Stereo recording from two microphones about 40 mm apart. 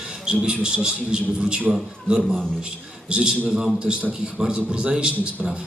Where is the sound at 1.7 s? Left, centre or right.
Centre.